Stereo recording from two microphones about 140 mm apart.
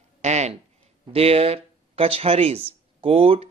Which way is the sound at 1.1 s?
45° right (ahead or behind).